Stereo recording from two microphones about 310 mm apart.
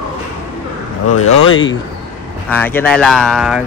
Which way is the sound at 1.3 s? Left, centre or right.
Left.